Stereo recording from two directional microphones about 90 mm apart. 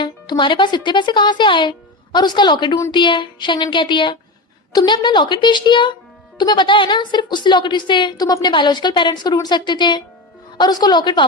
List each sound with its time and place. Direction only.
0.0 s a woman's voice: 60° left (ahead or behind)